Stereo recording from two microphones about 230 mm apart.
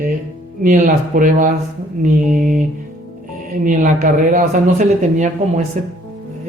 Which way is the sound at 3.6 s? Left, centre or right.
Right.